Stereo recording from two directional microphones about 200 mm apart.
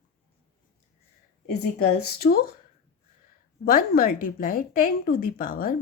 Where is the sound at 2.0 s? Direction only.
50° left (ahead or behind).